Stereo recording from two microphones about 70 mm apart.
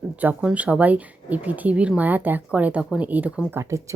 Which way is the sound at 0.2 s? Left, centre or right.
Right.